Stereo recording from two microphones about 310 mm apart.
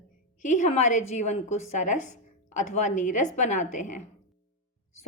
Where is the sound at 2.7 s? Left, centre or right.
Left.